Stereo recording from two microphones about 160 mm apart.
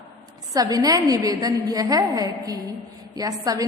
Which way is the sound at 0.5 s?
25° right (ahead or behind).